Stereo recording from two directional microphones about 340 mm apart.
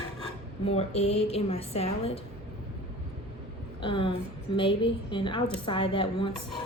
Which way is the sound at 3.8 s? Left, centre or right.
Centre.